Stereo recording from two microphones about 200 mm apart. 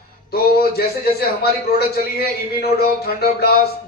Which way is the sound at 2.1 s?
50° left (ahead or behind).